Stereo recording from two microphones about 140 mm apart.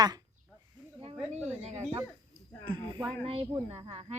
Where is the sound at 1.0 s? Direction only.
50° right (ahead or behind).